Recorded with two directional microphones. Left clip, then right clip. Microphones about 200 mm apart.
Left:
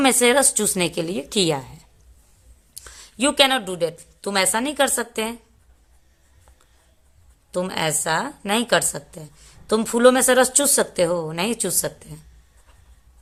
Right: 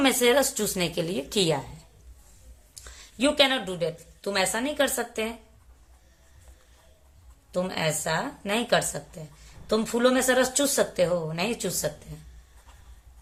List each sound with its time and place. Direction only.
0.0 s a woman's voice: 30° left (ahead or behind)
2.7 s a woman's voice: 40° left (ahead or behind)
7.5 s a woman's voice: 40° left (ahead or behind)